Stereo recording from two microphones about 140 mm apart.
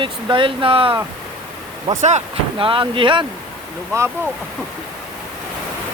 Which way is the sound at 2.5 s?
40° right (ahead or behind).